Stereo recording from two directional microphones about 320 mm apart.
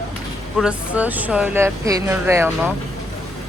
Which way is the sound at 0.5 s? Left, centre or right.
Centre.